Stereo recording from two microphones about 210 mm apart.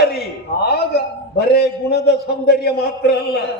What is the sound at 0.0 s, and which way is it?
A man's voice, 50° left (ahead or behind).